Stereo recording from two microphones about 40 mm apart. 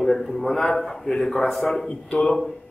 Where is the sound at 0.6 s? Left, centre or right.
Centre.